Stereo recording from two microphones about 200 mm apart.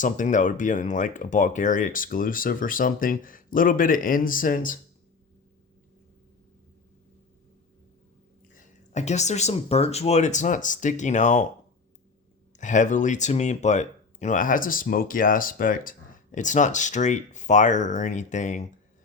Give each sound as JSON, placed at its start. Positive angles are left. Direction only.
{"t": 0.0, "sound": "speech", "side_deg": 40}
{"t": 8.5, "sound": "speech", "side_deg": 35}
{"t": 12.5, "sound": "speech", "side_deg": 40}